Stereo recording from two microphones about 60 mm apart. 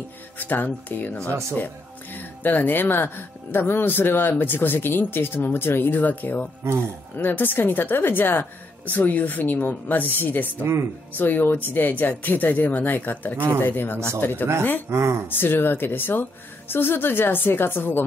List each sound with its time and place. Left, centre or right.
0.4 s speech: left
2.1 s speech: left
6.6 s speech: right
7.2 s speech: left
10.6 s speech: right
11.1 s speech: left
14.9 s speech: right
15.2 s speech: left